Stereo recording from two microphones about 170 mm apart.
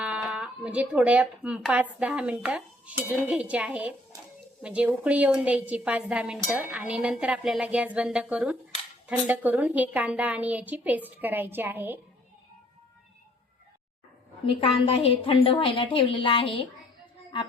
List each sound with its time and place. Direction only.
0.0 s speech: 5° right (ahead or behind)
14.9 s a woman's voice: 35° left (ahead or behind)